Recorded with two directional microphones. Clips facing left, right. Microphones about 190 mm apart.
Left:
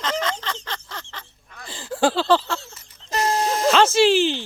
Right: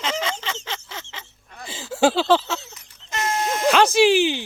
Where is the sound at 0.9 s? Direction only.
20° right (ahead or behind).